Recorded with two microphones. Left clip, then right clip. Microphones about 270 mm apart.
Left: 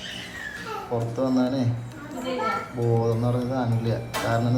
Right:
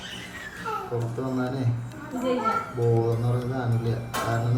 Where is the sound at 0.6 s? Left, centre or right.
Centre.